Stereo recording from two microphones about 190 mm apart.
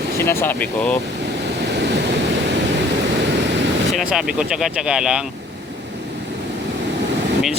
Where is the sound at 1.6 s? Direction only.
65° right (ahead or behind).